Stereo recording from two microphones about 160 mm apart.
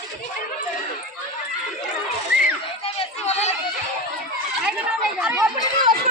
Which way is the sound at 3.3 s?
45° left (ahead or behind).